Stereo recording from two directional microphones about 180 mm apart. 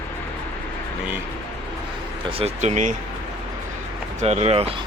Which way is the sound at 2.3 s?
35° right (ahead or behind).